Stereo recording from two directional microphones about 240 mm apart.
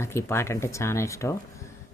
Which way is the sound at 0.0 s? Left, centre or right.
Centre.